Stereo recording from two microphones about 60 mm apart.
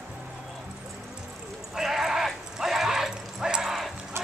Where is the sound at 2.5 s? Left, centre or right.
Centre.